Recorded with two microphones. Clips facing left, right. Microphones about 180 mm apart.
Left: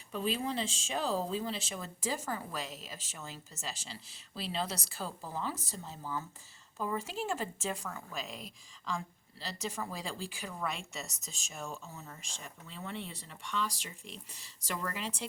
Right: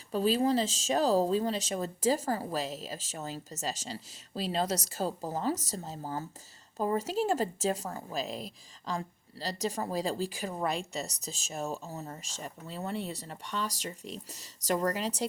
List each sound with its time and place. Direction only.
0.1 s a woman's voice: 35° right (ahead or behind)